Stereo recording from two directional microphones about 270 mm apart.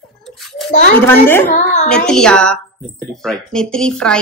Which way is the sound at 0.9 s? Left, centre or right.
Centre.